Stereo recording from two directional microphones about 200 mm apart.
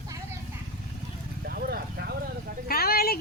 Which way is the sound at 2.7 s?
50° left (ahead or behind).